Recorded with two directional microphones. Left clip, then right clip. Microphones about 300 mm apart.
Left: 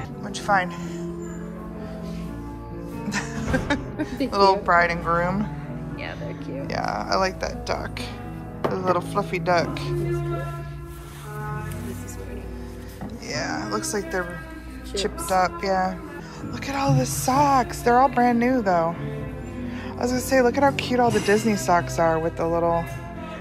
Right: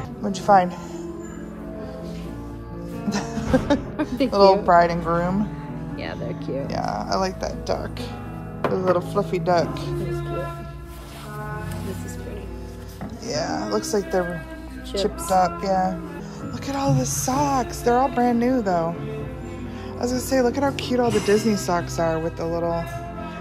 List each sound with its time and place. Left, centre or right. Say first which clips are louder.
0.2 s speech: right 5 dB; centre
3.1 s speech: right 4 dB; centre
6.0 s music: right 5 dB; right
6.7 s speech: left 2 dB; centre
8.9 s speech: right 2 dB; centre
13.3 s speech: right 3 dB; centre
20.0 s speech: left 1 dB; centre